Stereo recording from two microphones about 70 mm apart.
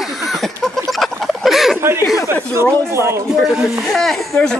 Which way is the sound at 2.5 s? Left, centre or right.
Right.